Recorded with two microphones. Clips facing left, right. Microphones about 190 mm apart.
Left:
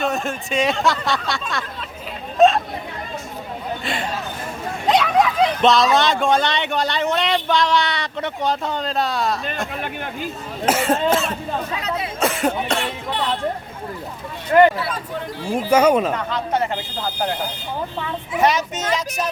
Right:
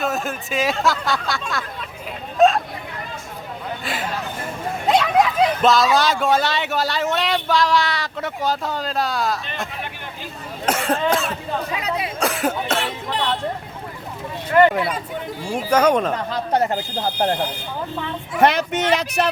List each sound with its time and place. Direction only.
0.0 s speech: centre (ahead or behind)
2.4 s hubbub: centre (ahead or behind)
3.8 s a sound: 5° right (ahead or behind)
4.9 s speech: 5° right (ahead or behind)
10.7 s speech: 5° left (ahead or behind)
11.8 s speech: 15° right (ahead or behind)
12.2 s cough: centre (ahead or behind)
14.5 s a sound: 35° left (ahead or behind)
15.5 s speech: 10° left (ahead or behind)
16.1 s speech: 40° right (ahead or behind)
18.3 s speech: 55° right (ahead or behind)